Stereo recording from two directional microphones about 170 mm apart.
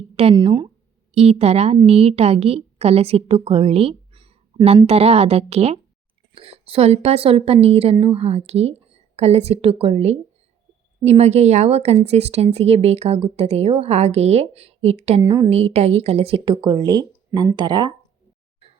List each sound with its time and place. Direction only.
0.2 s speech: 30° right (ahead or behind)
1.1 s a woman's voice: 40° right (ahead or behind)
15.2 s speech: 20° right (ahead or behind)
15.4 s speech: 40° right (ahead or behind)